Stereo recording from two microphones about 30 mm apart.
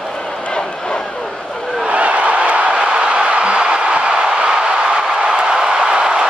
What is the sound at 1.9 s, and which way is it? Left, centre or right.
Crowd, right.